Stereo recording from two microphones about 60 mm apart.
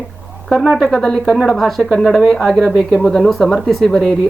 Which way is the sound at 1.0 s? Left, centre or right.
Centre.